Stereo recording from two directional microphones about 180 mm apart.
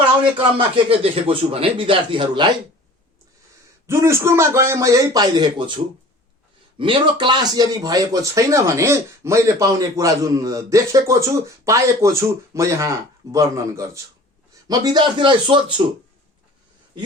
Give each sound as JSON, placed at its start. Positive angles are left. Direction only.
{"t": 0.3, "sound": "speech", "side_deg": -30}
{"t": 3.8, "sound": "speech", "side_deg": -15}